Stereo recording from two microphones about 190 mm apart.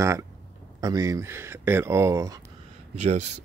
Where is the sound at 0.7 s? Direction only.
20° right (ahead or behind).